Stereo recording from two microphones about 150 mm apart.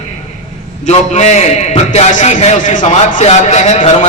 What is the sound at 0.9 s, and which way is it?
A man's voice, 50° left (ahead or behind).